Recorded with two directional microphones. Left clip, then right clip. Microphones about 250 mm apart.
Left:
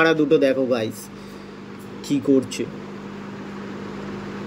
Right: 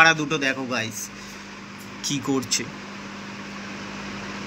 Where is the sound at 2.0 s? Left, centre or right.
Centre.